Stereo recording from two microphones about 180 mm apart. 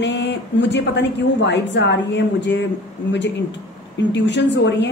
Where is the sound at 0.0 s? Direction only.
75° left (ahead or behind).